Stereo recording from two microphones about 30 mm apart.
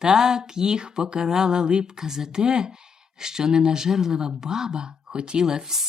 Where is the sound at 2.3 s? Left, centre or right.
Right.